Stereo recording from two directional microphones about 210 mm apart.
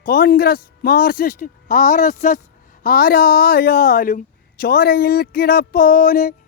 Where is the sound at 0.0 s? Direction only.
45° left (ahead or behind).